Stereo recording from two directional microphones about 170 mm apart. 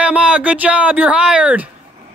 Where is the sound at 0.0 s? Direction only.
5° right (ahead or behind).